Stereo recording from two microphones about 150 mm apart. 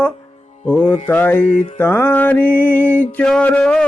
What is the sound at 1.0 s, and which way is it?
Music, 10° left (ahead or behind).